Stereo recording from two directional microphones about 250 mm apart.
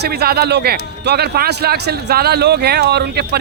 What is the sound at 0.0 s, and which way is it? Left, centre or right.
A man's voice, right.